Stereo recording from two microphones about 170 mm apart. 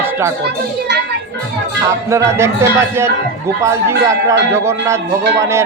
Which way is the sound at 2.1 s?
15° right (ahead or behind).